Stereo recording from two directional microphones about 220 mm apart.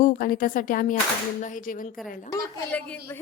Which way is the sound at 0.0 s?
40° left (ahead or behind).